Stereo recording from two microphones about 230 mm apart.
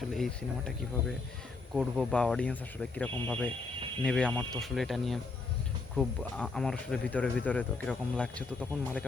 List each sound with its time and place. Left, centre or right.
0.1 s speech: centre